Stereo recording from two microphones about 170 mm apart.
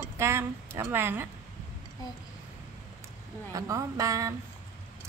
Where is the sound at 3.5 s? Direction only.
20° right (ahead or behind).